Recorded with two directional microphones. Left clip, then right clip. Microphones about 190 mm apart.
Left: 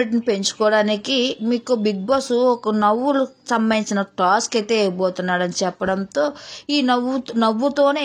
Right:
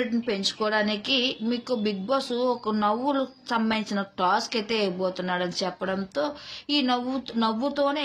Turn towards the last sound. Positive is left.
turn(degrees=50)  # may be behind; listen again after turning